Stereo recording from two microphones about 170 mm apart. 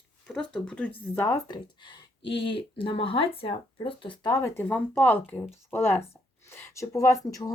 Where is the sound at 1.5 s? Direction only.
25° left (ahead or behind).